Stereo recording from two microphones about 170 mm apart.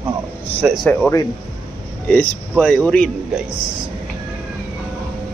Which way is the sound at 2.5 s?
5° left (ahead or behind).